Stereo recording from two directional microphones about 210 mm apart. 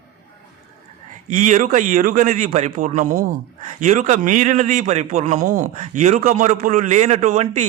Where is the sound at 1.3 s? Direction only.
35° right (ahead or behind).